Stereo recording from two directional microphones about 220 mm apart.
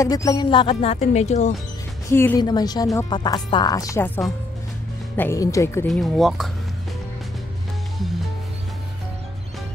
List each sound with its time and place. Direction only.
0.0 s speech: 15° left (ahead or behind)
2.0 s speech: 10° left (ahead or behind)
5.9 s speech: centre (ahead or behind)